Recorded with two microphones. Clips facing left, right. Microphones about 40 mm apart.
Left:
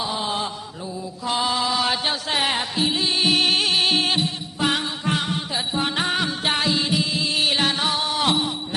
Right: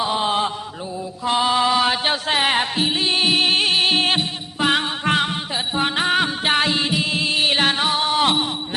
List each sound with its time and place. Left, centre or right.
0.0 s mantra: right
2.5 s music: right
3.2 s music: centre
6.5 s music: right